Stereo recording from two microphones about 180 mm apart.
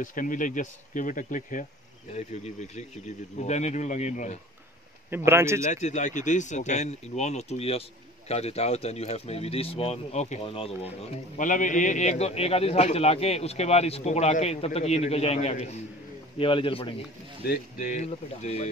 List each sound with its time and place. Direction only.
0.0 s speech: 50° left (ahead or behind)
5.1 s speech: 15° right (ahead or behind)
5.7 s a man's voice: 40° left (ahead or behind)
17.5 s speech: 45° left (ahead or behind)